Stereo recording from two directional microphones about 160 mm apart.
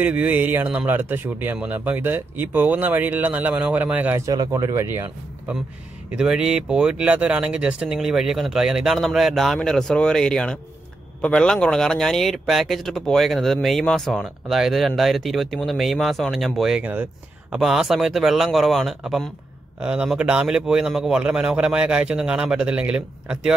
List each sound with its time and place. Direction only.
0.0 s speech: 10° right (ahead or behind)
4.3 s speech: 20° right (ahead or behind)
6.1 s speech: 5° right (ahead or behind)